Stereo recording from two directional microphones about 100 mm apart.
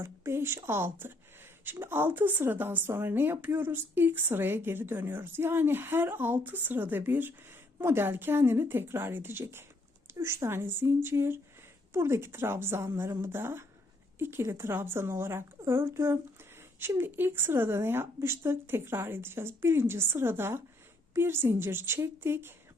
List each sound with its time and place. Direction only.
0.0 s speech: 25° right (ahead or behind)